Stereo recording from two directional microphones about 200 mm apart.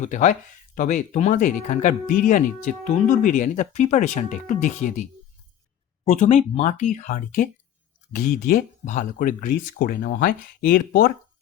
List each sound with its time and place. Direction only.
0.0 s speech: 35° left (ahead or behind)
6.1 s speech: 35° left (ahead or behind)